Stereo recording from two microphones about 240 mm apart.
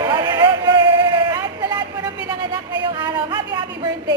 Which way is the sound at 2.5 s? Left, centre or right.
Centre.